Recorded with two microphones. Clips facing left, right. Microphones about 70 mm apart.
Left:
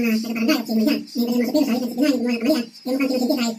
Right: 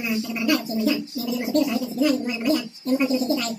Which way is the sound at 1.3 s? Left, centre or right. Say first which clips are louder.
Left 2 dB; centre.